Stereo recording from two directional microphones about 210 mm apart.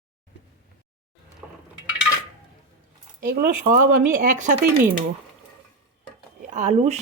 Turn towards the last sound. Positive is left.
turn(degrees=-35)  # may be behind; listen again after turning